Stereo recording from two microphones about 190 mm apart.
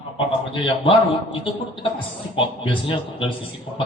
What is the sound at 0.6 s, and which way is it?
Speech, 25° left (ahead or behind).